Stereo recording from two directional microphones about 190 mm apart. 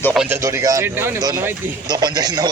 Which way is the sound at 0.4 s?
15° right (ahead or behind).